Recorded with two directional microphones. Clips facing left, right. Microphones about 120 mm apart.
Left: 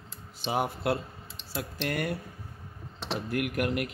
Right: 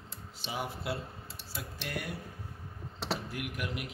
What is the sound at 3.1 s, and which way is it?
Speech, 60° left (ahead or behind).